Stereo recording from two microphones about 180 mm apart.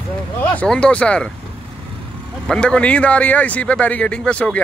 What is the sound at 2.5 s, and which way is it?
A man's voice, 5° left (ahead or behind).